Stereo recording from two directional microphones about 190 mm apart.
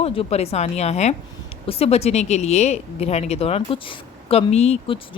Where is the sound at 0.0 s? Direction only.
30° left (ahead or behind).